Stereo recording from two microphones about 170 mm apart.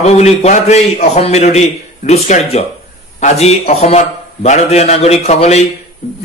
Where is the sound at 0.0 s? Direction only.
40° left (ahead or behind).